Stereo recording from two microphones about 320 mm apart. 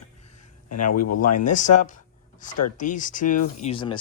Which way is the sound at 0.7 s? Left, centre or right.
Left.